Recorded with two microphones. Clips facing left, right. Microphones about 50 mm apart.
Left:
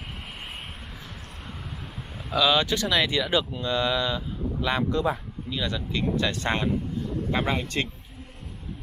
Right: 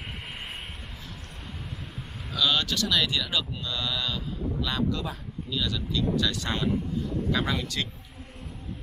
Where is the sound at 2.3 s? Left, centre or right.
Centre; by 7.8 s left.